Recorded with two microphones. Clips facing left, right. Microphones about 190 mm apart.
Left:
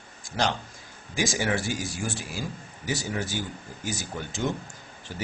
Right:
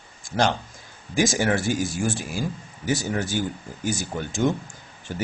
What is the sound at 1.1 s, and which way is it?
Speech, 50° right (ahead or behind).